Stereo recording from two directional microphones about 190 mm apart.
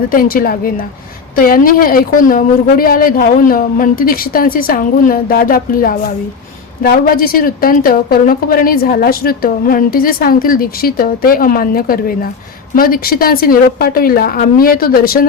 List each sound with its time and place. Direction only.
0.1 s a woman's voice: 45° left (ahead or behind)